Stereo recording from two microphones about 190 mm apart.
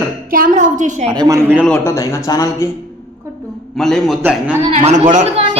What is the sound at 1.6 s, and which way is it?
Speech, 5° left (ahead or behind).